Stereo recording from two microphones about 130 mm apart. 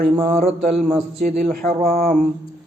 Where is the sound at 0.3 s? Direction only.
65° right (ahead or behind).